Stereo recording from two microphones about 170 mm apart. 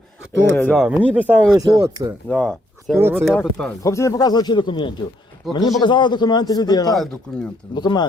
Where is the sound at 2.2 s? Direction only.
5° left (ahead or behind).